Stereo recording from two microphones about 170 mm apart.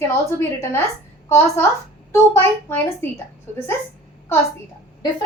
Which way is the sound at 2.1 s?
15° left (ahead or behind).